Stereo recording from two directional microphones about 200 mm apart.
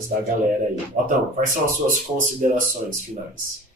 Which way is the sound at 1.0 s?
40° right (ahead or behind).